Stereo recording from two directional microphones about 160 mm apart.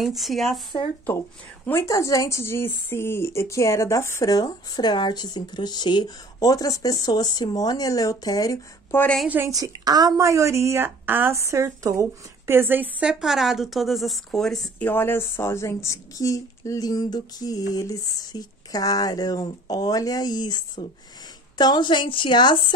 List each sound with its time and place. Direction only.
0.0 s speech: centre (ahead or behind)
1.7 s speech: 20° left (ahead or behind)
9.0 s speech: 5° left (ahead or behind)
9.3 s a woman's voice: 15° right (ahead or behind); by 14.7 s centre (ahead or behind)
14.8 s speech: 15° left (ahead or behind); by 22.7 s 30° left (ahead or behind)